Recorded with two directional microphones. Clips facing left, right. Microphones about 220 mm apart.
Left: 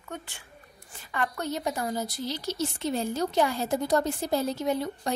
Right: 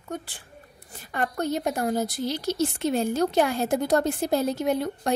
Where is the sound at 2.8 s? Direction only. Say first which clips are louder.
Right 4 dB; 70° right (ahead or behind).